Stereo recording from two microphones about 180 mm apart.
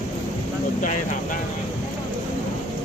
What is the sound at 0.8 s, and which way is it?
Speech, 45° left (ahead or behind).